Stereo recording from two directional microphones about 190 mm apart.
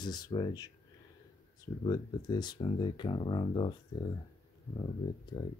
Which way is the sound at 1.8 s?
25° left (ahead or behind).